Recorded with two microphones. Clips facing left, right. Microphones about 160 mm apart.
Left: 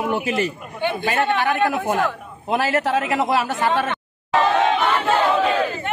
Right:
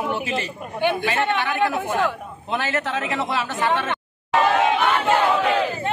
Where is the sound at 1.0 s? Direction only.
40° left (ahead or behind).